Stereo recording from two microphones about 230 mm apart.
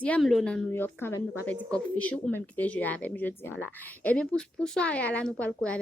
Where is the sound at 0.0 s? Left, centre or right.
Centre.